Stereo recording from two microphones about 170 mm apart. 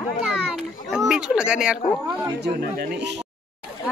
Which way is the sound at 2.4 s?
70° right (ahead or behind).